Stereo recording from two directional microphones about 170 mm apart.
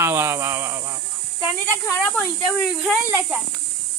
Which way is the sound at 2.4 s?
Centre (ahead or behind).